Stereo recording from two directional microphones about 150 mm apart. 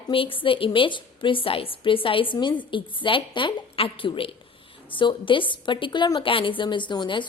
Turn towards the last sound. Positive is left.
turn(degrees=30)  # may be behind; listen again after turning